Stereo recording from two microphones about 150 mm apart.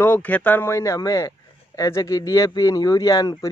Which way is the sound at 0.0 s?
10° left (ahead or behind).